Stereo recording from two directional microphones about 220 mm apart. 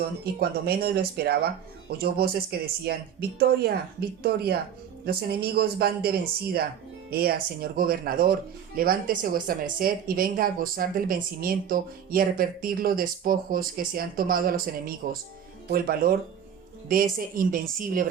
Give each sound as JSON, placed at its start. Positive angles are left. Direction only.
{"t": 0.3, "sound": "speech", "side_deg": -45}
{"t": 5.5, "sound": "speech", "side_deg": -45}